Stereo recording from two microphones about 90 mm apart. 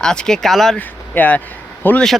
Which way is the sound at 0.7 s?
15° left (ahead or behind).